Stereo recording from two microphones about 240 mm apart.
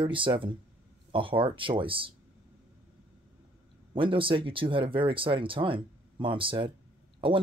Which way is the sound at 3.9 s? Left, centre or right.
Right.